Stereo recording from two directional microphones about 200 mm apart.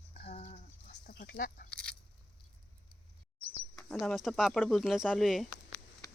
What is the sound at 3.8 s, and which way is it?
Speech, centre (ahead or behind).